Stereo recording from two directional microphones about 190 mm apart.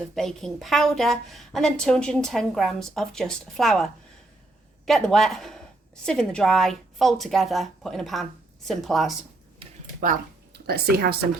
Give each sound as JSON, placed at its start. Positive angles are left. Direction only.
{"t": 0.2, "sound": "a woman's voice", "side_deg": 0}
{"t": 10.0, "sound": "speech", "side_deg": -50}